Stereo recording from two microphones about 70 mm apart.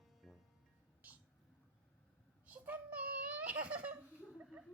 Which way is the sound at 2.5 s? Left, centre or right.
Right.